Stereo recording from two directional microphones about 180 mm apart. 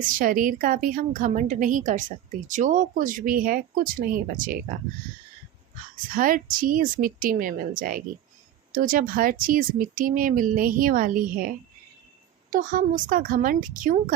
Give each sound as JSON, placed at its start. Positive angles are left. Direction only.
{"t": 0.1, "sound": "a woman's voice", "side_deg": -50}
{"t": 6.1, "sound": "a woman's voice", "side_deg": -50}
{"t": 12.5, "sound": "a woman's voice", "side_deg": -45}